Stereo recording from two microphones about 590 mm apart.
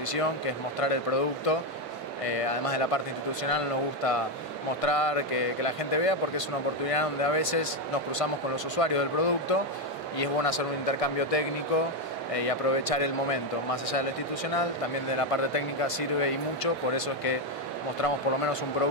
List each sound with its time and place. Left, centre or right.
0.7 s speech: left
8.7 s a man's voice: left
15.0 s speech: left